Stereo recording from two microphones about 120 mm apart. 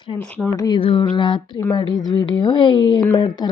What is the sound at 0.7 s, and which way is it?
Mantra, 45° left (ahead or behind).